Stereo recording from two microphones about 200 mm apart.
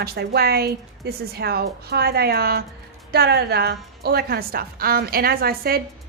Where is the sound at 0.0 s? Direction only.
55° right (ahead or behind).